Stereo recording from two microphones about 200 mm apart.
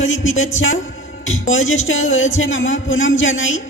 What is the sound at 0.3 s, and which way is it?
A man's voice, 75° left (ahead or behind).